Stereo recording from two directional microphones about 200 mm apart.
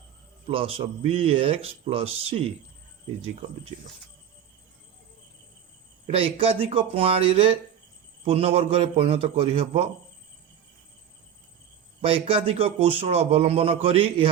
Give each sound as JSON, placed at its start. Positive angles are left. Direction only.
{"t": 0.4, "sound": "a man's voice", "side_deg": -30}
{"t": 6.1, "sound": "a man's voice", "side_deg": -30}
{"t": 12.0, "sound": "a man's voice", "side_deg": -30}